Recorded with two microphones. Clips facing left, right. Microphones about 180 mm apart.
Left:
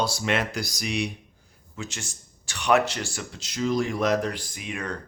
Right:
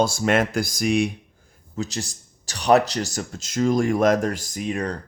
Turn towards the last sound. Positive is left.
turn(degrees=-35)  # may be behind; listen again after turning